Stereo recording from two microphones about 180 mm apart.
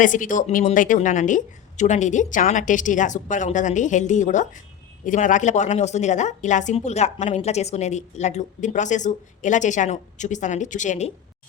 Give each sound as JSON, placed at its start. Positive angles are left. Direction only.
{"t": 0.0, "sound": "a woman's voice", "side_deg": 45}